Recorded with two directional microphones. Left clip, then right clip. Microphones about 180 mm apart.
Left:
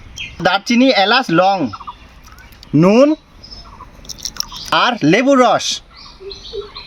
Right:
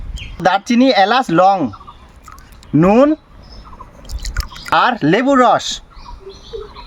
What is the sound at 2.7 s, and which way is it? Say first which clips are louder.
Speech: even; 25° left (ahead or behind).